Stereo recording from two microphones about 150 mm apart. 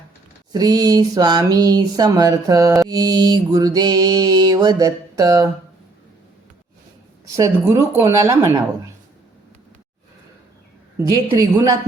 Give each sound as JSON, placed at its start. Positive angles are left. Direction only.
{"t": 0.5, "sound": "mantra", "side_deg": -25}
{"t": 7.3, "sound": "mantra", "side_deg": -20}
{"t": 11.3, "sound": "mantra", "side_deg": -25}